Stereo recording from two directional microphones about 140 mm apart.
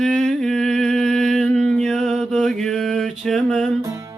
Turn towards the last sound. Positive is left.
turn(degrees=0)  # may be behind; listen again after turning